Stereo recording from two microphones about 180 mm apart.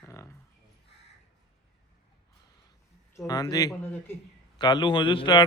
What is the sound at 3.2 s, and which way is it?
Speech, 20° left (ahead or behind).